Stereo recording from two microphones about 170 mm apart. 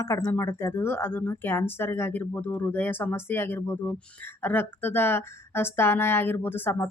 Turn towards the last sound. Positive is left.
turn(degrees=10)  # may be behind; listen again after turning